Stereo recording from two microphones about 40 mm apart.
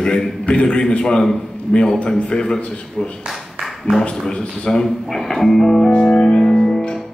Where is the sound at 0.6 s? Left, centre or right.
Centre.